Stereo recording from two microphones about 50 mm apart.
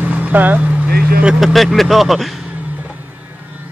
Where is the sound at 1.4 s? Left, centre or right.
Centre.